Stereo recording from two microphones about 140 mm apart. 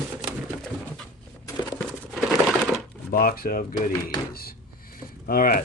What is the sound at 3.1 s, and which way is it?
Speech, 90° left.